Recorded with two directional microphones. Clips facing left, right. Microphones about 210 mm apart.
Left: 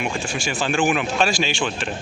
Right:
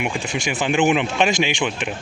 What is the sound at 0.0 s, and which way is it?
Speech, 20° right (ahead or behind).